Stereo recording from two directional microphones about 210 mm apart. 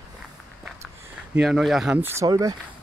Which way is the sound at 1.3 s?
Centre (ahead or behind).